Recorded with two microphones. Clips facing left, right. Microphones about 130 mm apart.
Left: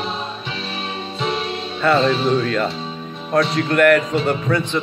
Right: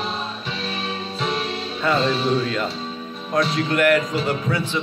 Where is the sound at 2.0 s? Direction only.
Centre (ahead or behind).